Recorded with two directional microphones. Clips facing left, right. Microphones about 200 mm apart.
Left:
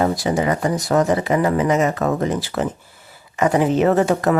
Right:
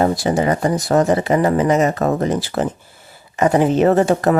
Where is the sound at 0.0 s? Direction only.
35° right (ahead or behind).